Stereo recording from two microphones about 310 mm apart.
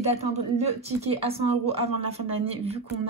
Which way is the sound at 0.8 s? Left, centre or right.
Centre.